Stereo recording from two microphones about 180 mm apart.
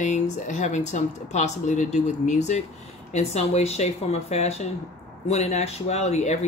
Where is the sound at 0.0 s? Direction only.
40° left (ahead or behind).